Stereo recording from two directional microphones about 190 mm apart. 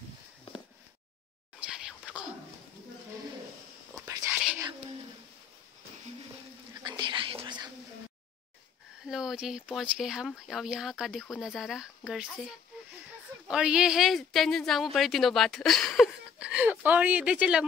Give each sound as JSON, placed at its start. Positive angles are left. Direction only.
{"t": 1.6, "sound": "whispering", "side_deg": -5}
{"t": 4.0, "sound": "whispering", "side_deg": -15}
{"t": 6.8, "sound": "whispering", "side_deg": -25}
{"t": 9.0, "sound": "speech", "side_deg": 0}